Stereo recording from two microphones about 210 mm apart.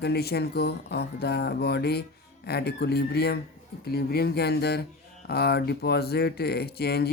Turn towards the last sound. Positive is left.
turn(degrees=50)  # may be behind; listen again after turning